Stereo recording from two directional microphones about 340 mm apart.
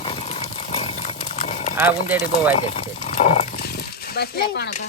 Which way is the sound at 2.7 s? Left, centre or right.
Left.